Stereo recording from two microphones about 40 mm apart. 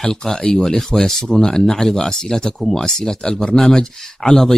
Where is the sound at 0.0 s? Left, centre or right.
Centre.